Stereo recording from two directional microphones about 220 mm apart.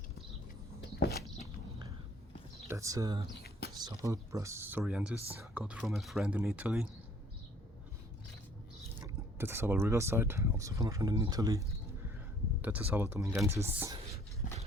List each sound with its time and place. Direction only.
0.9 s a sound: 45° left (ahead or behind)
2.6 s speech: 15° right (ahead or behind)
9.0 s speech: 10° right (ahead or behind)
12.6 s speech: 10° right (ahead or behind)
14.4 s horse: 35° left (ahead or behind)